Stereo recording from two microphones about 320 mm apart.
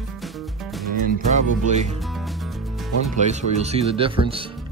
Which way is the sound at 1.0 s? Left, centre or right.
Right.